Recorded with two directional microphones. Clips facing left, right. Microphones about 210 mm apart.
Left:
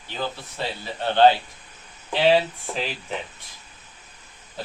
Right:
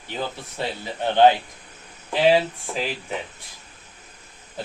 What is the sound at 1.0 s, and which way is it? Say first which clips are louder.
Speech: right 1 dB; 15° right (ahead or behind).